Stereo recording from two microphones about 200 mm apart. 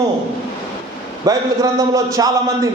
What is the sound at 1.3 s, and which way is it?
A man's voice, 15° right (ahead or behind).